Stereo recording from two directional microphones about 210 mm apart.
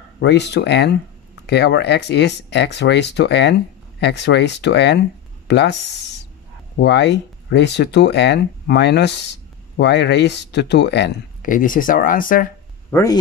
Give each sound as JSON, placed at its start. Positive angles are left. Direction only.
{"t": 0.2, "sound": "speech", "side_deg": 55}
{"t": 6.8, "sound": "speech", "side_deg": 55}
{"t": 11.4, "sound": "speech", "side_deg": 40}
{"t": 12.9, "sound": "speech", "side_deg": 15}